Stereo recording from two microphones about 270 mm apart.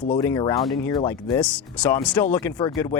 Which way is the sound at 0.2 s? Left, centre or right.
Centre.